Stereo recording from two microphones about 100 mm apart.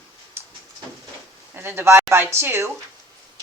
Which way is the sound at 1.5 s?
25° right (ahead or behind).